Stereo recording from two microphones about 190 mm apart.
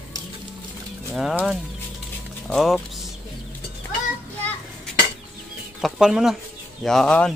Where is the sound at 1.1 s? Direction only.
Centre (ahead or behind).